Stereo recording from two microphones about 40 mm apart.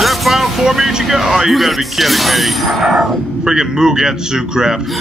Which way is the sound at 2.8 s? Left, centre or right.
Centre.